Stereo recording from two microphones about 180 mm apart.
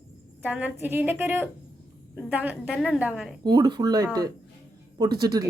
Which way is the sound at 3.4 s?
25° right (ahead or behind).